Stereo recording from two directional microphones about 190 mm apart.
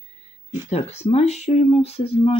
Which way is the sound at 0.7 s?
35° left (ahead or behind).